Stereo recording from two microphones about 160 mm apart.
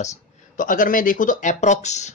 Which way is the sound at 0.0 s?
50° left (ahead or behind).